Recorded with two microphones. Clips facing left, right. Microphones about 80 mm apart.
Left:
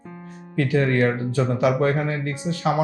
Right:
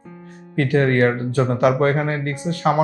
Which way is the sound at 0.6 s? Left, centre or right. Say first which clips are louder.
Right 3 dB; right.